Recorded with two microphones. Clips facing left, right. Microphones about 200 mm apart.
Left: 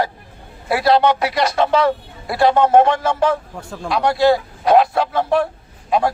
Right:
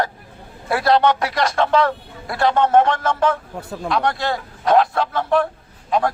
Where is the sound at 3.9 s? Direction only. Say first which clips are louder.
Left 7 dB; 5° left (ahead or behind).